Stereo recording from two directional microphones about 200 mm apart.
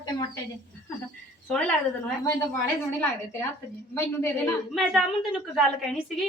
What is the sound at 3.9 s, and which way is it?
Speech, 10° left (ahead or behind).